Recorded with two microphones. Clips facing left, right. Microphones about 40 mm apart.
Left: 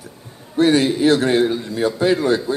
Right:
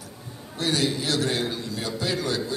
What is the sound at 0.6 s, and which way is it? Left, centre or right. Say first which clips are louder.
A man's voice: left 11 dB; left.